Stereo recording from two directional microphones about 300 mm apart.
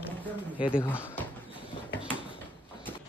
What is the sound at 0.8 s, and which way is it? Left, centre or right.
Speech, centre.